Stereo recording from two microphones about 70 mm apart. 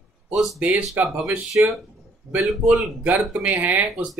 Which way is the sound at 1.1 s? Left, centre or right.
Centre.